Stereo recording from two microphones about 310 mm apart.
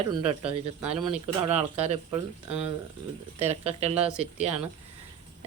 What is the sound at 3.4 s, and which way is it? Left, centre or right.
Speech, right.